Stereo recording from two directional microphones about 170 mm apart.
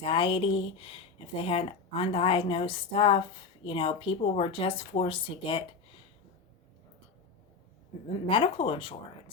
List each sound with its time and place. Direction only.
0.0 s speech: 30° left (ahead or behind)
8.0 s speech: 30° left (ahead or behind)